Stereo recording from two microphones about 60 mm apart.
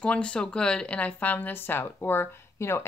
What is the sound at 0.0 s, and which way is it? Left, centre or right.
Speech, left.